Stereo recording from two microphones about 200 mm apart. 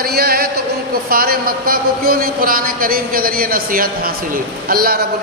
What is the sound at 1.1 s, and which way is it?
A man's voice, 45° right (ahead or behind).